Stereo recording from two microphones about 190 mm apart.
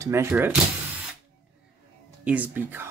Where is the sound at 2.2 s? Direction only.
5° right (ahead or behind).